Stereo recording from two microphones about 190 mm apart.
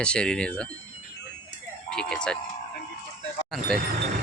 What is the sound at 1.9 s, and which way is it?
Speech, 5° left (ahead or behind).